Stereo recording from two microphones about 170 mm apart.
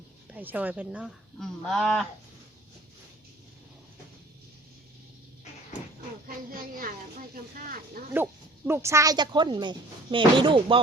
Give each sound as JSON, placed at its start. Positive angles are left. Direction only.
{"t": 0.3, "sound": "speech", "side_deg": -10}
{"t": 6.2, "sound": "speech", "side_deg": -55}
{"t": 8.1, "sound": "speech", "side_deg": -15}